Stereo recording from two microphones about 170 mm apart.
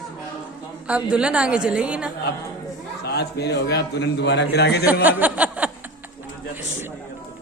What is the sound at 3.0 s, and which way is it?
A man's voice, 75° left (ahead or behind).